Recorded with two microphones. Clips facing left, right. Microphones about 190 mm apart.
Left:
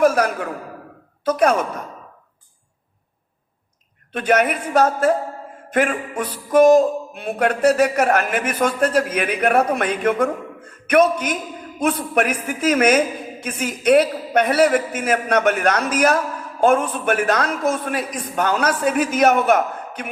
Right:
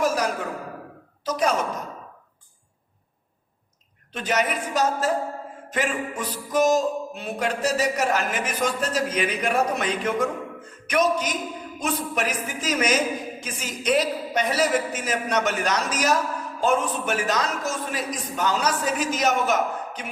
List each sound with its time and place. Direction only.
0.0 s a sound: 55° left (ahead or behind)
1.2 s a man's voice: 55° left (ahead or behind)
4.1 s a man's voice: 55° left (ahead or behind)